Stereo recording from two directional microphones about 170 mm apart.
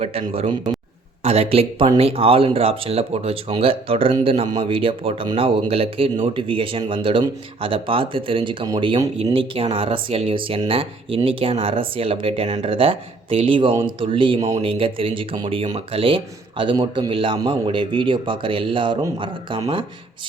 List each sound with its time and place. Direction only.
0.0 s speech: 35° right (ahead or behind)